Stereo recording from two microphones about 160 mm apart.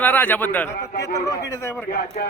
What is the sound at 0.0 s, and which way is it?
A man's voice, 10° left (ahead or behind).